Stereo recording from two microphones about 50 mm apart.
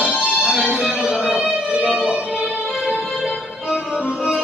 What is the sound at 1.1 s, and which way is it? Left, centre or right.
Music, centre.